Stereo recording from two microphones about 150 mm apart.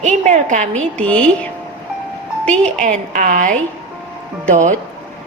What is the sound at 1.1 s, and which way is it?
A woman's voice, 10° left (ahead or behind).